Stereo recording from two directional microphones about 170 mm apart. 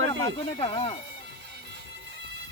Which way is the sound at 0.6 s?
35° left (ahead or behind).